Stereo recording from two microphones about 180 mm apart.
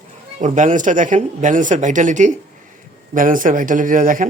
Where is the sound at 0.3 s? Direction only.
40° right (ahead or behind).